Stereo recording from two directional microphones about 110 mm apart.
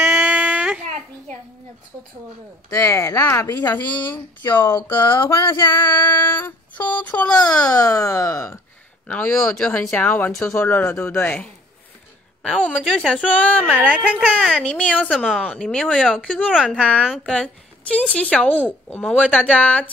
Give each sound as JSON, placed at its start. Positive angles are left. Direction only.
{"t": 0.0, "sound": "a sound", "side_deg": -15}
{"t": 2.7, "sound": "speech", "side_deg": 25}
{"t": 7.5, "sound": "speech", "side_deg": 35}
{"t": 9.0, "sound": "speech", "side_deg": 15}
{"t": 12.4, "sound": "speech", "side_deg": 5}
{"t": 13.7, "sound": "speech", "side_deg": -15}
{"t": 14.4, "sound": "speech", "side_deg": 10}